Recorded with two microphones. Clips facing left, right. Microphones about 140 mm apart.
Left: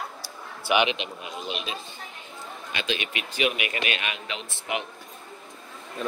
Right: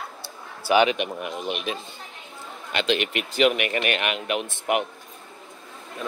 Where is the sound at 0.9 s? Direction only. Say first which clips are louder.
Right 6 dB; 55° right (ahead or behind).